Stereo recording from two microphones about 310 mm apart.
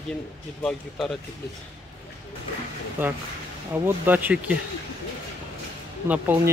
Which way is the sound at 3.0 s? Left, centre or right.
Centre.